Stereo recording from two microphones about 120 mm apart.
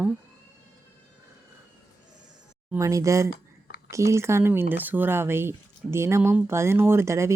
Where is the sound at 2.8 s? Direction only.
25° right (ahead or behind).